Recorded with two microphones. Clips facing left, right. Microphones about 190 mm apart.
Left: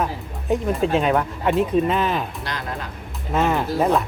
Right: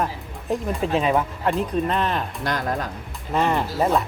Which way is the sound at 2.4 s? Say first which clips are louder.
Right 5 dB; 50° right (ahead or behind).